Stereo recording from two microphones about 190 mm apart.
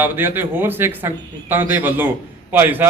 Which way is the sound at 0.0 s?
10° right (ahead or behind).